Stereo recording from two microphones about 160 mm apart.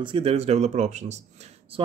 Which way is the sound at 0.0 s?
35° right (ahead or behind).